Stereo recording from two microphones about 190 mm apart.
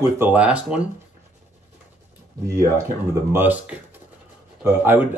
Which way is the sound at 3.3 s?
10° right (ahead or behind).